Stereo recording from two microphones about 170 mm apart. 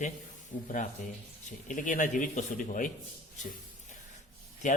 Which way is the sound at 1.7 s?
50° left (ahead or behind).